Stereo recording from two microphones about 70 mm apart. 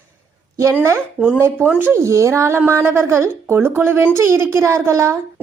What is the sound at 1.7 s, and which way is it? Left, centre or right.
Speech, right.